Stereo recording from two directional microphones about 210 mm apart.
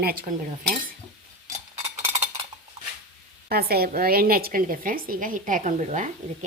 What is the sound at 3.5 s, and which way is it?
A woman's voice, 45° right (ahead or behind).